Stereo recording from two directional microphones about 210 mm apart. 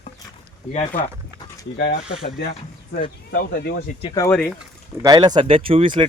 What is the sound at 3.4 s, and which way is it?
Speech, 50° left (ahead or behind).